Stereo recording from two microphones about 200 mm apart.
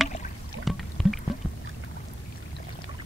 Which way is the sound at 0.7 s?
Centre (ahead or behind).